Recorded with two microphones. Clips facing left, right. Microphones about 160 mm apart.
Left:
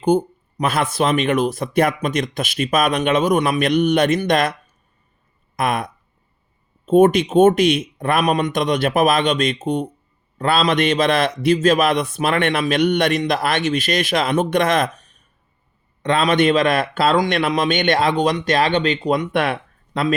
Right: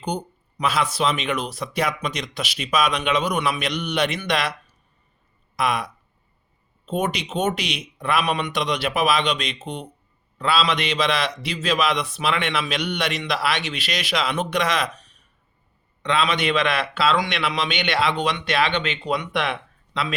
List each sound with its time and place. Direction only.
0.0 s a man's voice: 50° left (ahead or behind)